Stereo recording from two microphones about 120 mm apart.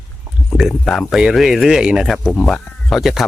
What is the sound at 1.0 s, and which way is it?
Speech, 5° right (ahead or behind).